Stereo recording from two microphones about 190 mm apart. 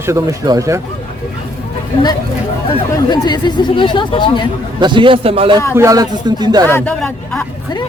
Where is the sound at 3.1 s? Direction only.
20° left (ahead or behind).